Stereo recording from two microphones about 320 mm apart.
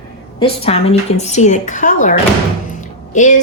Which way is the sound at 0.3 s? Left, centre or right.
Centre.